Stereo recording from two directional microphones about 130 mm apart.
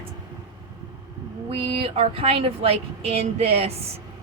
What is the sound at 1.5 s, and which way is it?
A woman's voice, 40° right (ahead or behind).